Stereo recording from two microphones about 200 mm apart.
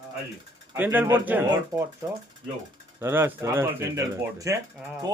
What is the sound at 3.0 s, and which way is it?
Speech, 10° right (ahead or behind).